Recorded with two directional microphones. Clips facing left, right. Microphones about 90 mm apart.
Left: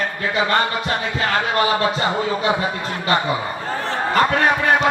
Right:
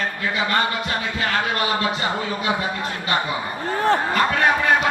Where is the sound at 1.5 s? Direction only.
30° left (ahead or behind).